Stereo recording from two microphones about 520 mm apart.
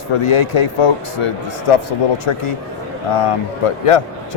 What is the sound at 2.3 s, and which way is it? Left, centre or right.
Speech, left.